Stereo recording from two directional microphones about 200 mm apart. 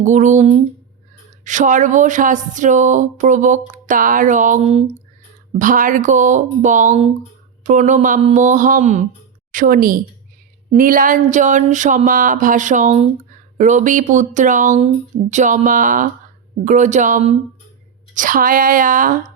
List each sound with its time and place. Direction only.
0.0 s speech: 35° right (ahead or behind)